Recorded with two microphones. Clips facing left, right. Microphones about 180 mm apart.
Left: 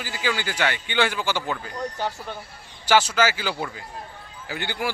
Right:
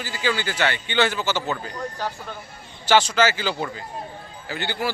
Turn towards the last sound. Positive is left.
turn(degrees=15)  # may be behind; listen again after turning